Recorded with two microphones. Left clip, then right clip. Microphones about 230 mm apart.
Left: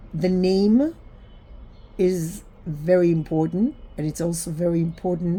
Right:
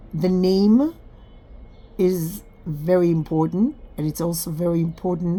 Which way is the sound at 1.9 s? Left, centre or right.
Centre.